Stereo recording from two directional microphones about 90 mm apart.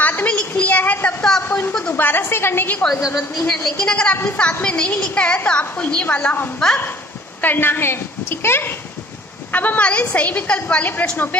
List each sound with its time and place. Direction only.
0.0 s a sound: 20° left (ahead or behind)
2.0 s a woman's voice: 20° left (ahead or behind)
3.2 s a woman's voice: centre (ahead or behind)